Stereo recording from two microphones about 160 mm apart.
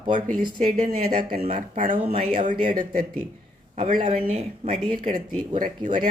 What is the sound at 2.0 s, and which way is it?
Speech, 40° right (ahead or behind).